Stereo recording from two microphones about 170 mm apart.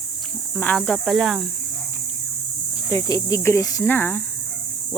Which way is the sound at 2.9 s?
20° left (ahead or behind).